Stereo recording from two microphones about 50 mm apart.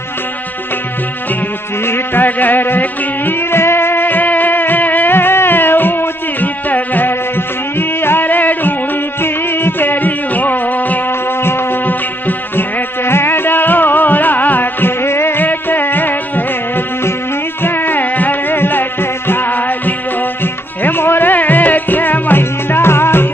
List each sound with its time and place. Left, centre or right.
1.9 s music: left
9.2 s music: left
11.4 s music: left
20.8 s music: left